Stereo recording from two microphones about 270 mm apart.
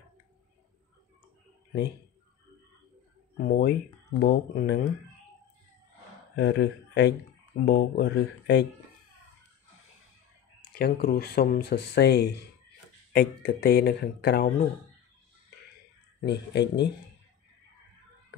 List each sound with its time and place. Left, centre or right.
3.3 s speech: left
6.3 s speech: left
10.7 s speech: left
16.3 s speech: left